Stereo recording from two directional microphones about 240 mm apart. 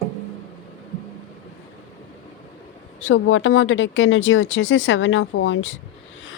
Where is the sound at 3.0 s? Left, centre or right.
Left.